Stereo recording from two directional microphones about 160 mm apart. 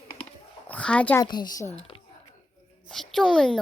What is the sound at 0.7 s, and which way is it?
Speech, 5° left (ahead or behind).